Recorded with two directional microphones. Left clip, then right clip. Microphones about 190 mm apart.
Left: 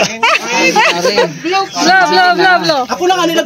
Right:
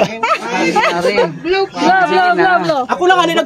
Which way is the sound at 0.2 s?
5° left (ahead or behind).